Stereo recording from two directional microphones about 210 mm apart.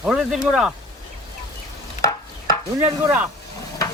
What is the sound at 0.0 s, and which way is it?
Speech, centre (ahead or behind).